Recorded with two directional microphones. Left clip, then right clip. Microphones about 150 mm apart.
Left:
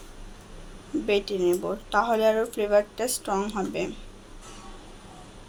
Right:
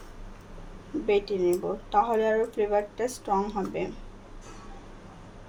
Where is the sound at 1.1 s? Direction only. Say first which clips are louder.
Even; centre (ahead or behind).